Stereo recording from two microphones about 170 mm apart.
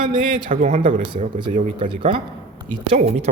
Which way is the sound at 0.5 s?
45° right (ahead or behind).